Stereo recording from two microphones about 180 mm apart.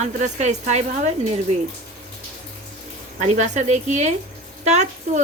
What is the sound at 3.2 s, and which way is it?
Speech, 40° right (ahead or behind).